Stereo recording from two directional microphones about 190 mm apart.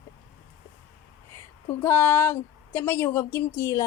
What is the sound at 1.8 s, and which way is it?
A woman's voice, 10° left (ahead or behind).